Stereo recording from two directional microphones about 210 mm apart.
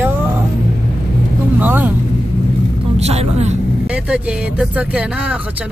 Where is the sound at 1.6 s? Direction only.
10° right (ahead or behind).